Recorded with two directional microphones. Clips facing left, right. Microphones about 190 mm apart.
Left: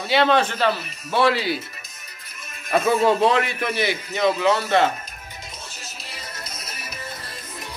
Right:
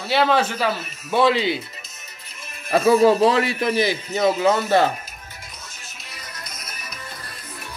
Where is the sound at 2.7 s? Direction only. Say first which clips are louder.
Right 4 dB; 35° right (ahead or behind).